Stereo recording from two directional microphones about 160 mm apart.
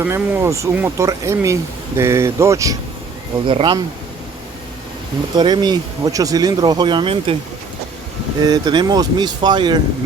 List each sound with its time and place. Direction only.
0.0 s speech: 15° right (ahead or behind)
3.4 s speech: 30° right (ahead or behind)
5.3 s speech: 25° right (ahead or behind)
8.4 s speech: 25° right (ahead or behind)